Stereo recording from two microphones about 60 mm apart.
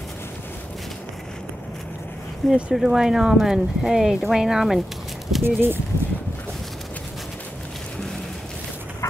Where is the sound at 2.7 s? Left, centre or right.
Centre.